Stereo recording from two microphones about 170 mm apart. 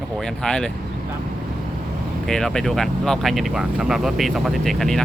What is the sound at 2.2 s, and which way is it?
Speech, 5° left (ahead or behind).